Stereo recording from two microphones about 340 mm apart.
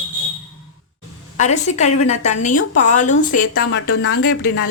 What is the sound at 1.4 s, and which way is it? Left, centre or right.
A woman's voice, centre.